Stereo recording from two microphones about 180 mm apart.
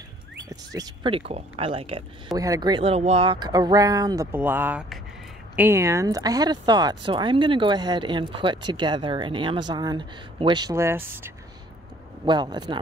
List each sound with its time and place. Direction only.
0.7 s speech: 30° right (ahead or behind)
2.3 s speech: 20° right (ahead or behind)
12.3 s speech: 25° right (ahead or behind)